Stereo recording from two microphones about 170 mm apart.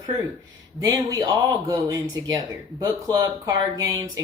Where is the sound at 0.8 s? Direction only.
20° right (ahead or behind).